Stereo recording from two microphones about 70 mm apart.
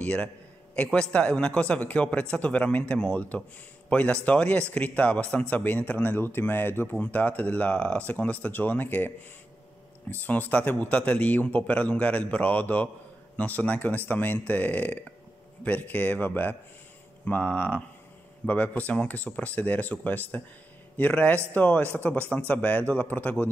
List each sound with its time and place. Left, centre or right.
0.0 s a man's voice: centre
10.2 s speech: left